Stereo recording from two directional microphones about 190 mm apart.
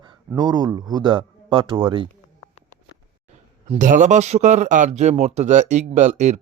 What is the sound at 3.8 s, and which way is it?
Speech, 45° right (ahead or behind).